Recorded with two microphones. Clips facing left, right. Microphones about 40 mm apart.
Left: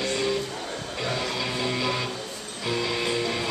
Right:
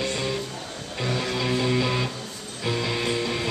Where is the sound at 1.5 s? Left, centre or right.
Centre.